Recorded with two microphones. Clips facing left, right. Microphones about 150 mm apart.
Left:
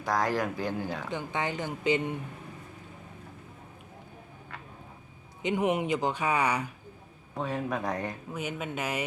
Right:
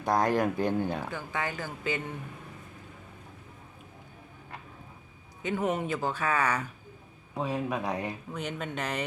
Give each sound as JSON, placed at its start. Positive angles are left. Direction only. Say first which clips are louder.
{"t": 0.0, "sound": "speech", "louder": "right 3 dB", "side_deg": -25}
{"t": 1.1, "sound": "speech", "louder": "left 2 dB", "side_deg": 20}
{"t": 5.4, "sound": "speech", "louder": "left 2 dB", "side_deg": 15}
{"t": 7.3, "sound": "speech", "louder": "right 1 dB", "side_deg": -10}
{"t": 8.3, "sound": "speech", "louder": "left 1 dB", "side_deg": 10}